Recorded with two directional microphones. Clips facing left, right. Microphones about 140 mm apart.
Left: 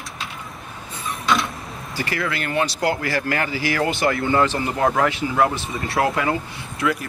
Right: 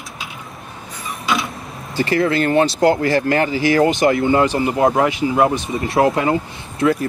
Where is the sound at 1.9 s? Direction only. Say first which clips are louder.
Right 9 dB; 25° right (ahead or behind).